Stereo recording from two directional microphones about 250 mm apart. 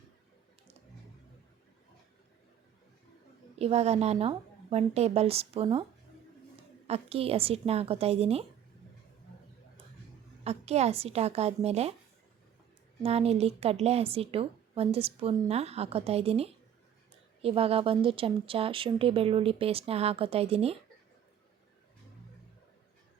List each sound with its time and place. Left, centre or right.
3.6 s a woman's voice: right
6.8 s a woman's voice: right
10.4 s a woman's voice: right
13.0 s a woman's voice: right